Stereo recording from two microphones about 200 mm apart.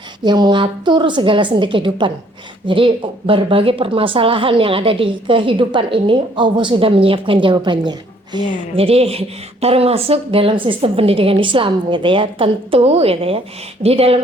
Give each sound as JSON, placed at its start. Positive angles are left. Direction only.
{"t": 0.3, "sound": "speech", "side_deg": -20}